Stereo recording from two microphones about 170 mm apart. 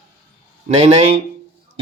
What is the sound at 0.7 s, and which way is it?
Speech, 40° right (ahead or behind).